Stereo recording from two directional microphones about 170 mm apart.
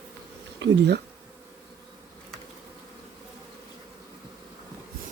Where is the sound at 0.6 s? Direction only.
90° right.